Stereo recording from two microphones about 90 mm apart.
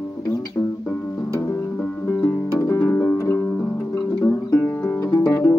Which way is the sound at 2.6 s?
30° left (ahead or behind).